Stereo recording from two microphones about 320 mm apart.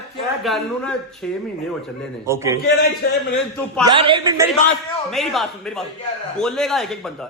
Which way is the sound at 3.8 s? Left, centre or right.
Centre.